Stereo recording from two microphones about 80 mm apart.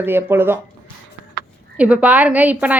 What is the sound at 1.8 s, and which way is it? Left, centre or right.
Speech, centre.